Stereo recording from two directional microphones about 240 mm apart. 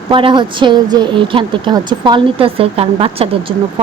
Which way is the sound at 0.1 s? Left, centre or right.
Right.